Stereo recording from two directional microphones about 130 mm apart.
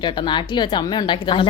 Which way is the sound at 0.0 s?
35° left (ahead or behind).